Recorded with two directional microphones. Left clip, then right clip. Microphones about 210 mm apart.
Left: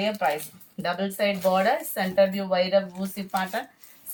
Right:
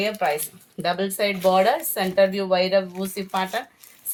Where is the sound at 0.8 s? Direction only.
55° right (ahead or behind).